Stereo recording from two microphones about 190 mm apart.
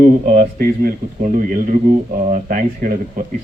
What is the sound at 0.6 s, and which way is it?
Speech, 50° right (ahead or behind).